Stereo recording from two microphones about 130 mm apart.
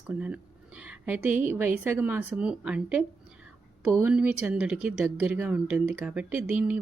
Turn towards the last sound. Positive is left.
turn(degrees=-10)  # may be behind; listen again after turning